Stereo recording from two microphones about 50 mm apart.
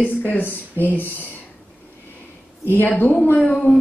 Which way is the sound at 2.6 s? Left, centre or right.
Left.